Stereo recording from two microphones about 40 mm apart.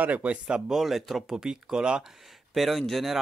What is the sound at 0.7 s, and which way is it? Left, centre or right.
Speech, centre.